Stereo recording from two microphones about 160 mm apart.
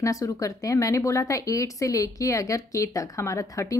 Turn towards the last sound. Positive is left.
turn(degrees=20)  # may be behind; listen again after turning